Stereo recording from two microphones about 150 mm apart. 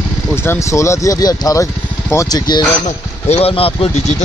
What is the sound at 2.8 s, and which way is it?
Speech, 45° left (ahead or behind).